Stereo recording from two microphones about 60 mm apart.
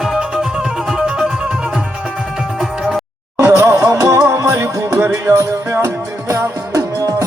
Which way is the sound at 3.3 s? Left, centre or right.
Right.